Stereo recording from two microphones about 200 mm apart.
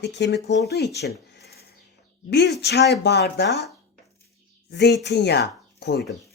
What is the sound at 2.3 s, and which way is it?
Speech, 55° left (ahead or behind).